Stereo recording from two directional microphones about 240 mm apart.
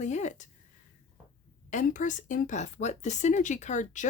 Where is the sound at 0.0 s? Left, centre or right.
Left.